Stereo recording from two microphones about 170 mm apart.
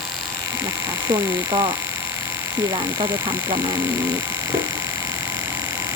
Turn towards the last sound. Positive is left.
turn(degrees=-15)  # may be behind; listen again after turning